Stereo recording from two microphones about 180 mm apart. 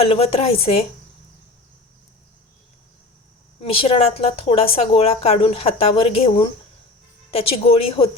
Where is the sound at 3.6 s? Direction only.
35° left (ahead or behind).